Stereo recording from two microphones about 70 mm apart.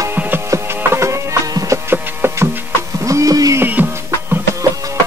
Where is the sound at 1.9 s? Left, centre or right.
Right.